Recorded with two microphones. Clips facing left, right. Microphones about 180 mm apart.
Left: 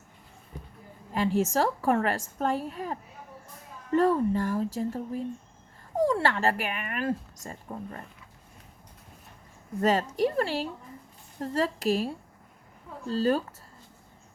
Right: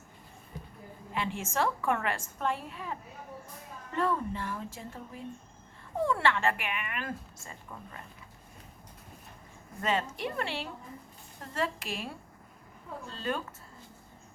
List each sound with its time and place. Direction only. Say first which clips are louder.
1.1 s a woman's voice: left 8 dB; 40° left (ahead or behind)
6.2 s a woman's voice: left 2 dB; 40° left (ahead or behind)
9.8 s a woman's voice: left 7 dB; 40° left (ahead or behind)